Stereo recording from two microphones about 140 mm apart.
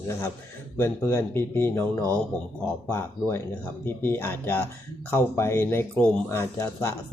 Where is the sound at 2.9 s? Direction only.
15° left (ahead or behind).